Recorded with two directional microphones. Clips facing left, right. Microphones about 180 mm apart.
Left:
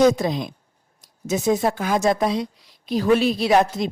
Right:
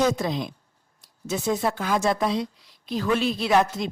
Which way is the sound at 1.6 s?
40° left (ahead or behind).